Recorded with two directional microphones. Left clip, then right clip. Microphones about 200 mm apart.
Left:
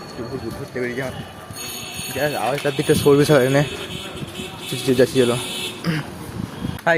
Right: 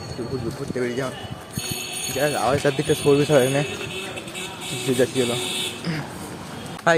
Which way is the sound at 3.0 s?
25° left (ahead or behind).